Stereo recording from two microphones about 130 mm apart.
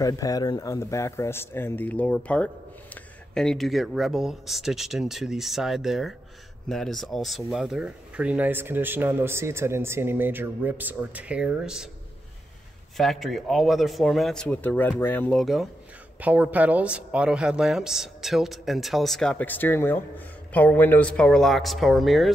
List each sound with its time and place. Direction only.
0.0 s speech: 30° left (ahead or behind); by 11.9 s 5° right (ahead or behind)
12.9 s speech: centre (ahead or behind)
15.3 s speech: centre (ahead or behind)
16.2 s speech: 10° right (ahead or behind)